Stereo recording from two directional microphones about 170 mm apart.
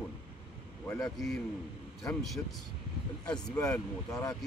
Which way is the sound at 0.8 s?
20° left (ahead or behind).